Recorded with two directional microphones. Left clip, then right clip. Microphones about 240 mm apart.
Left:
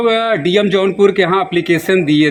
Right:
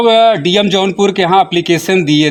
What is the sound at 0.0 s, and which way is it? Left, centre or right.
Speech, right.